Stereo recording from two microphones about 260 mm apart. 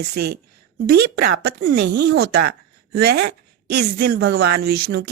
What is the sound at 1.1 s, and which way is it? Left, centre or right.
Speech, right.